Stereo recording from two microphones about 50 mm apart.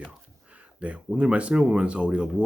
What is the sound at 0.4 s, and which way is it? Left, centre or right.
Speech, right.